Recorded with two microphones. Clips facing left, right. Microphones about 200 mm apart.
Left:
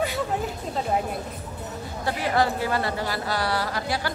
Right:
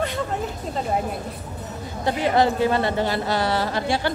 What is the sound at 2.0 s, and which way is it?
Speech, 20° right (ahead or behind).